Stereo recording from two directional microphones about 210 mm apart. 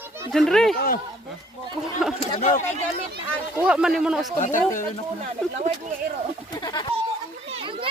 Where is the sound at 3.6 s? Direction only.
5° right (ahead or behind).